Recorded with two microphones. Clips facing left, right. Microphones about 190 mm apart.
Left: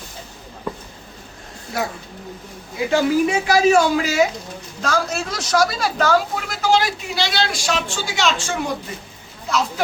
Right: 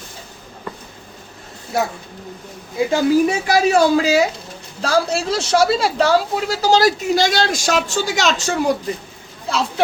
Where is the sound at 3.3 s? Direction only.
35° right (ahead or behind).